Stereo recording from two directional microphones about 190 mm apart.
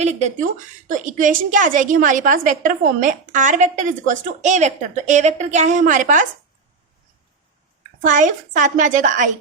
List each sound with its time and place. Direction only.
0.0 s a woman's voice: 35° right (ahead or behind)
8.0 s a woman's voice: 45° right (ahead or behind)